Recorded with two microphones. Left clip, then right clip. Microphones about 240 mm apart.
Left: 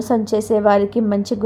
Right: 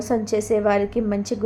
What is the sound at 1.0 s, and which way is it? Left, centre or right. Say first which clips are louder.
Speech: left 4 dB; centre.